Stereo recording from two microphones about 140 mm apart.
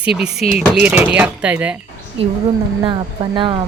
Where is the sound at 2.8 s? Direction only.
35° right (ahead or behind).